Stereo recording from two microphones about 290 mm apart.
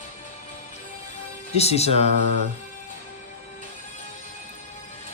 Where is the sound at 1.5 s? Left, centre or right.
Left.